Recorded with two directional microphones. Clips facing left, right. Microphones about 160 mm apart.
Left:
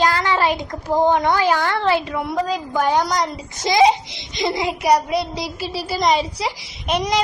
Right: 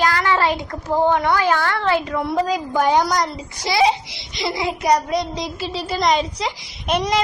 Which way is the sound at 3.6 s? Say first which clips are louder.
Left 3 dB; 20° left (ahead or behind).